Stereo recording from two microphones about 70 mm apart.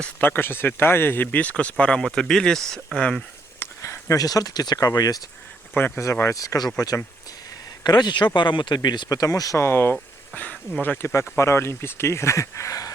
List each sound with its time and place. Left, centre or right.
0.2 s speech: left; by 3.2 s centre
3.8 s speech: left
4.9 s speech: left
5.7 s speech: left
6.2 s speech: left
7.9 s speech: left
9.6 s speech: left
11.1 s speech: left